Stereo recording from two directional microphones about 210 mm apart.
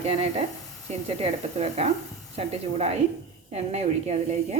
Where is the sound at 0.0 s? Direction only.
30° right (ahead or behind).